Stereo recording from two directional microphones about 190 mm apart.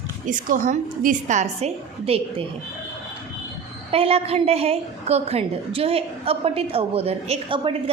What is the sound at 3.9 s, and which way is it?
A woman's voice, 30° right (ahead or behind).